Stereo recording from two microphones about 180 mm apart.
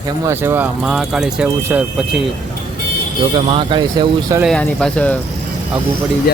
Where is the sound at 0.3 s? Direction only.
15° right (ahead or behind).